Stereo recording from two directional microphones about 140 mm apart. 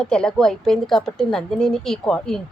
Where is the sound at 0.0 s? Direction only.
5° left (ahead or behind).